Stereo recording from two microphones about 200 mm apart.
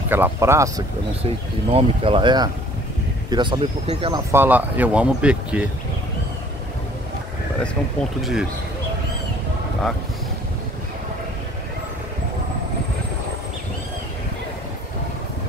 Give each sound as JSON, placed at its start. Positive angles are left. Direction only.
{"t": 0.1, "sound": "speech", "side_deg": -10}
{"t": 1.2, "sound": "speech", "side_deg": -30}
{"t": 4.1, "sound": "speech", "side_deg": -10}
{"t": 8.2, "sound": "speech", "side_deg": 0}